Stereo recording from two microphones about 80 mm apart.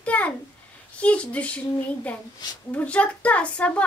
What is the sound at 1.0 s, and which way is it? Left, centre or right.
Speech, centre.